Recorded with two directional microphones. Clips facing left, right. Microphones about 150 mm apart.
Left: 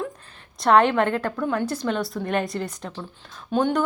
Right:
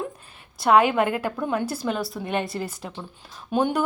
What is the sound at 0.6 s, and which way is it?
Speech, 5° right (ahead or behind).